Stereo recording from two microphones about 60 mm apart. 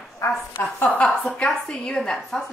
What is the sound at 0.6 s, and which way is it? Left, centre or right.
Speech, left.